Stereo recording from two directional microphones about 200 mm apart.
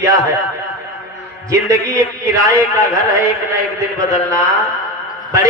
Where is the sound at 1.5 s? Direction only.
15° right (ahead or behind).